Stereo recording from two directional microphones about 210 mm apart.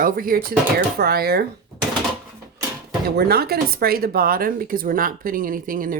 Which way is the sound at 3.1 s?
50° right (ahead or behind).